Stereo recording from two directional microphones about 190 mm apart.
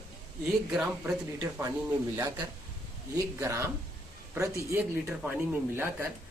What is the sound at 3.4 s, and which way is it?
Speech, 15° right (ahead or behind).